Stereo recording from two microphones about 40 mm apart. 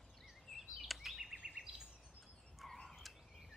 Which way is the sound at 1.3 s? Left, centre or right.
Right.